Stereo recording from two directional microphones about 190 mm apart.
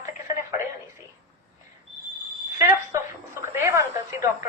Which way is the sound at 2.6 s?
15° right (ahead or behind).